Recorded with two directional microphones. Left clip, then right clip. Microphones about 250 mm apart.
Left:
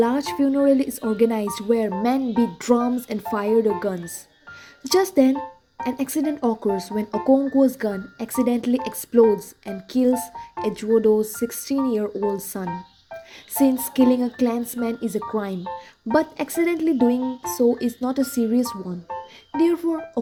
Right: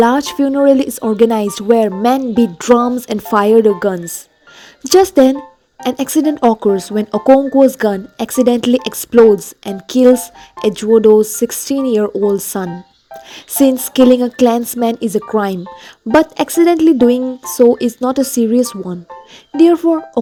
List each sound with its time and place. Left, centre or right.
0.0 s speech: right